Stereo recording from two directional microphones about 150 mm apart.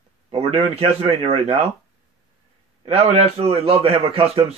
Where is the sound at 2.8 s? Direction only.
40° right (ahead or behind).